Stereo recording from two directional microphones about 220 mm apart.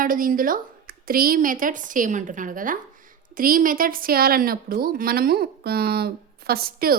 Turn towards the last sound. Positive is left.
turn(degrees=-45)  # may be behind; listen again after turning